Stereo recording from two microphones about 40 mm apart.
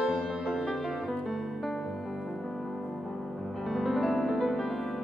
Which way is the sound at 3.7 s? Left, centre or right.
Centre.